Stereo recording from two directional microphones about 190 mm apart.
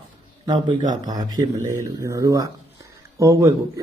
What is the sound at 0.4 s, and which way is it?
Speech, 25° right (ahead or behind).